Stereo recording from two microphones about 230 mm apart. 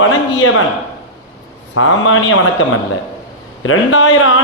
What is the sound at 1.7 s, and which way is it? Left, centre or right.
Speech, left.